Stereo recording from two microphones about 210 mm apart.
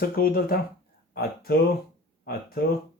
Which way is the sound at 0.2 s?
45° left (ahead or behind).